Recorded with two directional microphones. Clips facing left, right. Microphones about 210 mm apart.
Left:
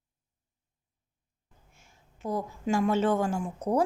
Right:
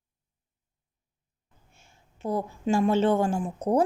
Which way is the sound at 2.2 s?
30° right (ahead or behind).